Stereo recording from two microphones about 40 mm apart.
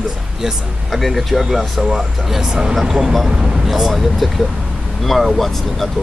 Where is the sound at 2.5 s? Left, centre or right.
Right.